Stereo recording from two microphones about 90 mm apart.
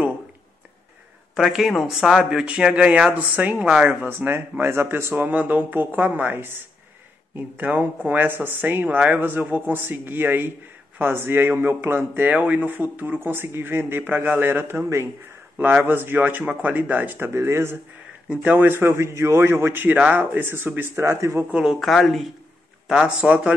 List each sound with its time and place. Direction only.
1.3 s speech: 5° right (ahead or behind); by 17.7 s 30° right (ahead or behind)
18.3 s speech: 15° right (ahead or behind)
18.7 s speech: 25° right (ahead or behind)
21.5 s speech: 10° right (ahead or behind)
21.7 s speech: centre (ahead or behind)
22.8 s speech: 10° right (ahead or behind)